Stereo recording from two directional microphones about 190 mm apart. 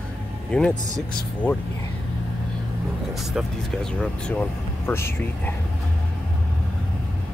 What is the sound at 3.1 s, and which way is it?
Speech, centre (ahead or behind).